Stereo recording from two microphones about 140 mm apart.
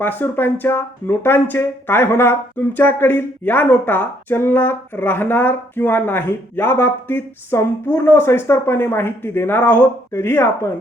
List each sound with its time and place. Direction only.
0.0 s speech: 15° left (ahead or behind)